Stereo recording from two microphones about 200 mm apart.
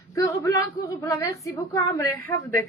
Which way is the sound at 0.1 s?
15° left (ahead or behind).